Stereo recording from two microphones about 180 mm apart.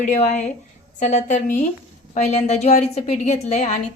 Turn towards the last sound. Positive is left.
turn(degrees=40)  # may be behind; listen again after turning